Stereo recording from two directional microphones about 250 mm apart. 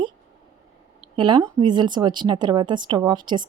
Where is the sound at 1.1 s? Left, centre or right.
Centre.